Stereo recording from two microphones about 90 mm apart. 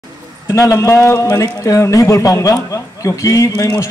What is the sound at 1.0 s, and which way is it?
Speech, 15° left (ahead or behind).